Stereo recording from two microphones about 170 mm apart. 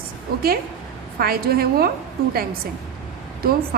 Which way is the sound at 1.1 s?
60° right (ahead or behind).